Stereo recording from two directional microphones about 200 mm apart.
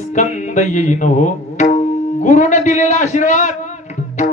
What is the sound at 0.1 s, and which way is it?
Music, 35° left (ahead or behind).